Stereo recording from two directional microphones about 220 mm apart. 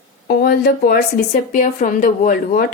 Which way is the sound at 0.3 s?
45° left (ahead or behind).